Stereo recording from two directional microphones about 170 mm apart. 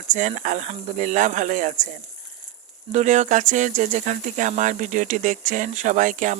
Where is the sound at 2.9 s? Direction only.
45° right (ahead or behind).